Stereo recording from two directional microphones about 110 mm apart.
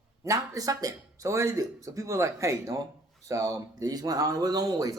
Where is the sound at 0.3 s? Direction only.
35° right (ahead or behind).